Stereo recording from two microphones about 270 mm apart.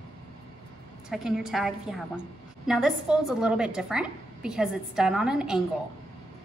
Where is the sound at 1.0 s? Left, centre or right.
Centre.